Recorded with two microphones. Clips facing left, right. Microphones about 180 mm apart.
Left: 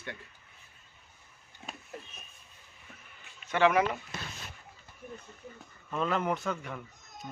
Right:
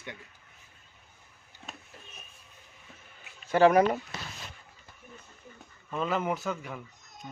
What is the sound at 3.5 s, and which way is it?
Speech, 35° right (ahead or behind).